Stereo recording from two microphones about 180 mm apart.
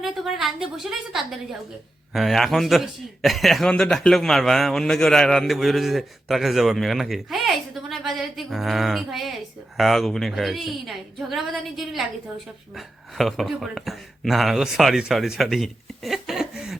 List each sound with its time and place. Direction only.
0.0 s a man's voice: centre (ahead or behind)